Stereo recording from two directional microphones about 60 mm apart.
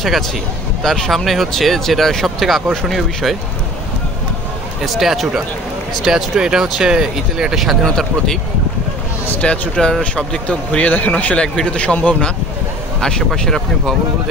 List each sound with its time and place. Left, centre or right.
0.8 s speech: centre
4.8 s speech: centre
7.8 s speech: centre
9.4 s speech: centre
13.4 s speech: centre